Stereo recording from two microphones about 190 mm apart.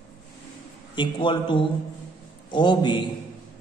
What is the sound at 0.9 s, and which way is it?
A man's voice, 25° left (ahead or behind).